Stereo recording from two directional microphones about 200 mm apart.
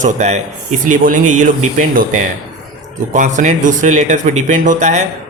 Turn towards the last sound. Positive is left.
turn(degrees=-35)  # may be behind; listen again after turning